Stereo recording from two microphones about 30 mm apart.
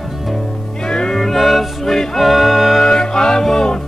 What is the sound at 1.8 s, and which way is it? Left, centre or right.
Music, centre.